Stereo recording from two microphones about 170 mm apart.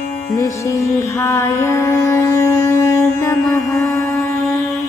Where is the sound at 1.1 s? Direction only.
15° left (ahead or behind).